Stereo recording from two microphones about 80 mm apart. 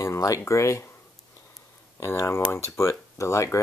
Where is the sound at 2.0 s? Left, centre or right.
Left.